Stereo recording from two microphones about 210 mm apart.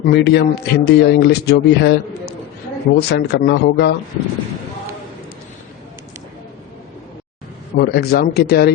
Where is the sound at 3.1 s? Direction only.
50° left (ahead or behind).